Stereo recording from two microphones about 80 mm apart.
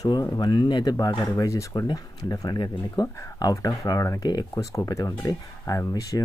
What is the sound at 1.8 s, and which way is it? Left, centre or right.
Speech, left.